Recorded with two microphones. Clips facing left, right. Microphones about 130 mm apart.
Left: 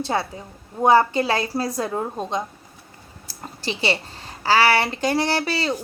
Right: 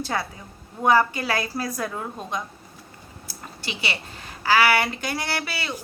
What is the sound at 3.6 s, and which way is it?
A woman's voice, 35° left (ahead or behind).